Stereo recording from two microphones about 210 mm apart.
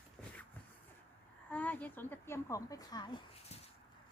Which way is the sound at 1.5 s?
5° left (ahead or behind).